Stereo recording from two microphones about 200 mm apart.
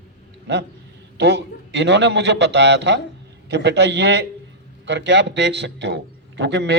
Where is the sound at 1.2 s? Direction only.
60° right (ahead or behind).